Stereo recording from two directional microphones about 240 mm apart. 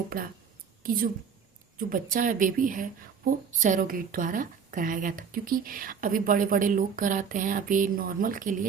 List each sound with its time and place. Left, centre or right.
0.1 s a woman's voice: right